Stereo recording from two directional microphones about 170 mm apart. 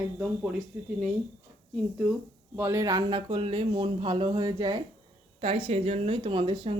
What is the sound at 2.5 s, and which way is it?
Speech, 15° right (ahead or behind).